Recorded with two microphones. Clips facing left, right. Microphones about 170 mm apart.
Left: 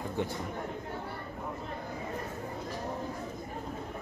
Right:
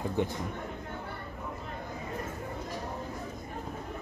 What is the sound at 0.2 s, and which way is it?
Speech, 20° right (ahead or behind).